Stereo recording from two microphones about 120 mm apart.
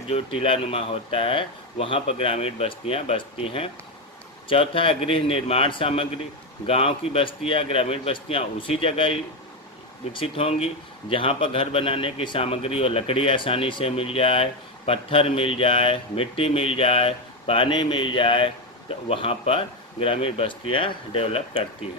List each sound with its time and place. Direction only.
0.1 s a man's voice: 50° left (ahead or behind)